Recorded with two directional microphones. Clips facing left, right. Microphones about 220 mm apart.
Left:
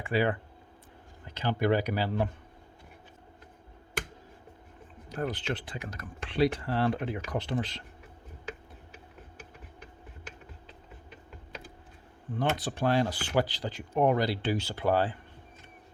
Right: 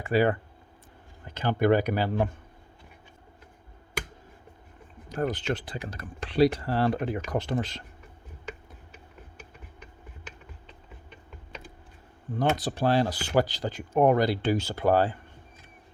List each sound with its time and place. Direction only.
0.0 s speech: 40° right (ahead or behind)
5.0 s speech: 45° right (ahead or behind)
10.7 s typing: 5° left (ahead or behind)
12.3 s speech: 40° right (ahead or behind)